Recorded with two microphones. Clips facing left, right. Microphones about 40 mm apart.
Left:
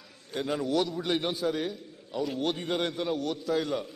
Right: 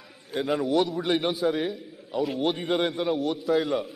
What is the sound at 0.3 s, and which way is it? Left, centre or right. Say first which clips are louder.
A man's voice: right 4 dB; centre.